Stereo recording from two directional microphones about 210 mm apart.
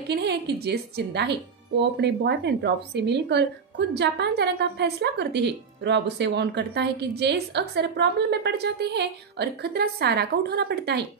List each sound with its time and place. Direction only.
0.1 s speech: 50° right (ahead or behind)